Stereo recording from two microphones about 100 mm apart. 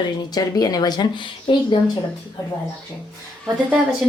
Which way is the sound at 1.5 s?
60° left (ahead or behind).